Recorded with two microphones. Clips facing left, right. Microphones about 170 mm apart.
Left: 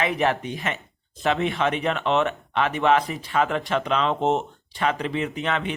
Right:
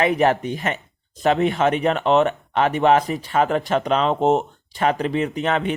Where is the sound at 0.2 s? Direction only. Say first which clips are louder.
Right 5 dB; 40° right (ahead or behind).